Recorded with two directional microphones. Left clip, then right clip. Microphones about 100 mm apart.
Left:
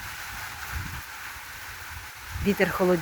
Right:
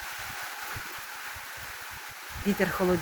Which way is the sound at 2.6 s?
20° left (ahead or behind).